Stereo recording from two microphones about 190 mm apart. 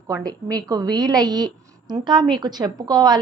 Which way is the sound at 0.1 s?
20° right (ahead or behind).